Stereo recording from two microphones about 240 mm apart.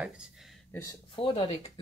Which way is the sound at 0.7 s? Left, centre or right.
Centre.